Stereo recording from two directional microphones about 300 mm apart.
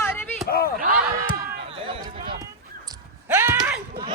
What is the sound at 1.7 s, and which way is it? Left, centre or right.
Run, centre.